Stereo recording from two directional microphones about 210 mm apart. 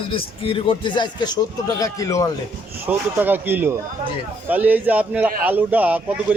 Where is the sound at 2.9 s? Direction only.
10° right (ahead or behind).